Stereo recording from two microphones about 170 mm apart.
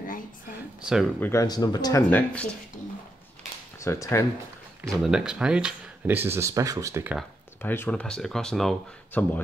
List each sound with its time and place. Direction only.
0.8 s speech: 5° right (ahead or behind)
1.2 s speech: 15° left (ahead or behind)
2.0 s speech: 10° left (ahead or behind)
3.8 s speech: 15° left (ahead or behind)
5.0 s speech: 5° right (ahead or behind)
7.6 s speech: 10° left (ahead or behind)